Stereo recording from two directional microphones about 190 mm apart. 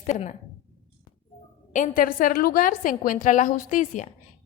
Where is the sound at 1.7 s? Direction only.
45° left (ahead or behind).